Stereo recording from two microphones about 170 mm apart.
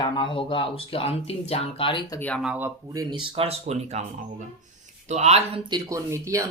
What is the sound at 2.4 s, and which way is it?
Speech, 10° right (ahead or behind).